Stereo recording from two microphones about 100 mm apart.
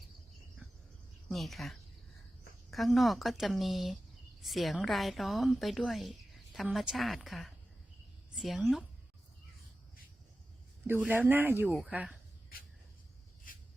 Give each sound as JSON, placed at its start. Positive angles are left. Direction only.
{"t": 1.3, "sound": "a woman's voice", "side_deg": 0}
{"t": 11.0, "sound": "speech", "side_deg": -15}
{"t": 11.7, "sound": "a woman's voice", "side_deg": -5}